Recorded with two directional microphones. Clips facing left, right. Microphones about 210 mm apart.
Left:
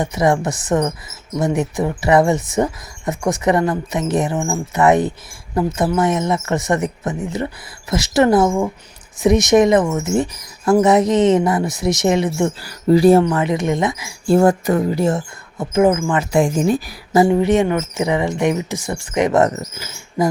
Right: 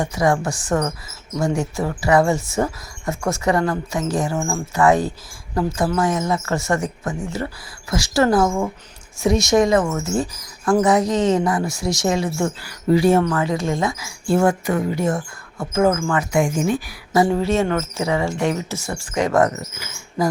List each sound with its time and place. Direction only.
0.0 s speech: 20° left (ahead or behind)
12.6 s speech: 35° left (ahead or behind)
13.2 s speech: 20° left (ahead or behind)
14.3 s speech: 35° left (ahead or behind); by 16.2 s 15° left (ahead or behind)
16.3 s speech: 35° left (ahead or behind)
17.2 s speech: 20° left (ahead or behind)
19.5 s speech: 35° left (ahead or behind)